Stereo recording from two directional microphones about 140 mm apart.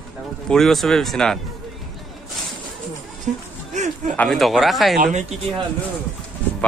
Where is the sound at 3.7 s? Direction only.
55° right (ahead or behind).